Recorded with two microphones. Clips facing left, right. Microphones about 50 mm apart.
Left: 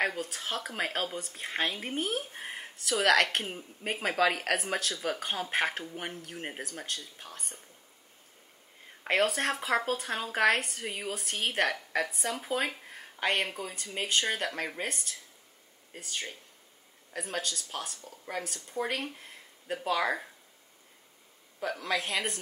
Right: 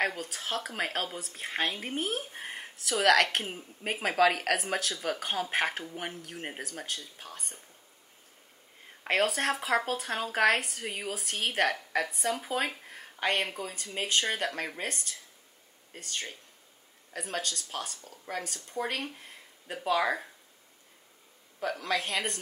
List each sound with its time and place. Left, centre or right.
0.0 s speech: centre
9.0 s speech: centre
21.5 s speech: centre